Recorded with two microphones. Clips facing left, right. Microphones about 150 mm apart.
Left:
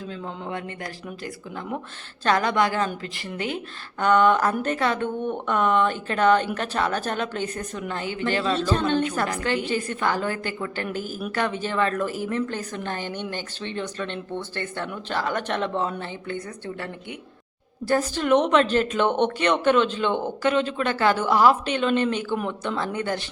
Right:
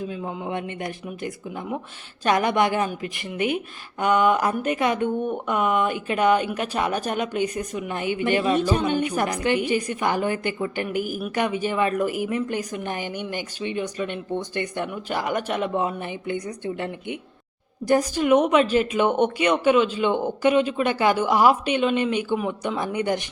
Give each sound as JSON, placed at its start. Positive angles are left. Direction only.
{"t": 0.0, "sound": "a woman's voice", "side_deg": -15}
{"t": 2.2, "sound": "a woman's voice", "side_deg": -20}